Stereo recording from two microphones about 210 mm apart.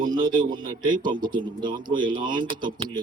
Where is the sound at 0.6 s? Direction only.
40° right (ahead or behind).